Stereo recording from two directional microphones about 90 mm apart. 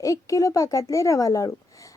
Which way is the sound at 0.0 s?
40° left (ahead or behind).